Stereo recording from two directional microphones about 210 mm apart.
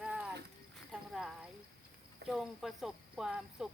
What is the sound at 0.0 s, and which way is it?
Horse, 5° right (ahead or behind).